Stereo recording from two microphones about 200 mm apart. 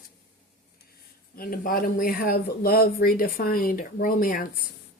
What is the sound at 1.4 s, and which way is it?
Speech, 45° left (ahead or behind).